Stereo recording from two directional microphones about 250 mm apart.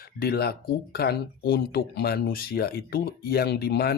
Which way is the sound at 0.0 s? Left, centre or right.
Left.